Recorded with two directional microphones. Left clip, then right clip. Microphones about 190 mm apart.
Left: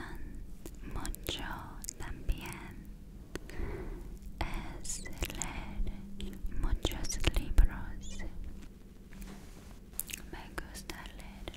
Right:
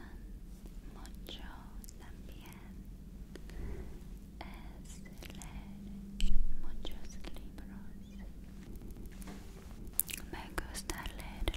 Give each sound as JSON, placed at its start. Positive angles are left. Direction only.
{"t": 0.9, "sound": "whispering", "side_deg": 50}
{"t": 3.3, "sound": "a sound", "side_deg": 35}
{"t": 4.4, "sound": "whispering", "side_deg": 40}
{"t": 10.0, "sound": "whispering", "side_deg": -10}